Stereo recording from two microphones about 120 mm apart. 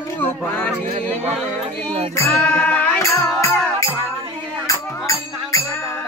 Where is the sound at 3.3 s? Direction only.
25° left (ahead or behind).